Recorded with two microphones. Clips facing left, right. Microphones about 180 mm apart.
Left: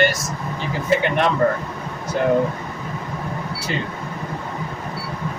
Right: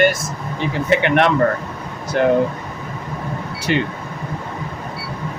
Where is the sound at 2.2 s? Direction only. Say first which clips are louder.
Right 4 dB; 75° right (ahead or behind).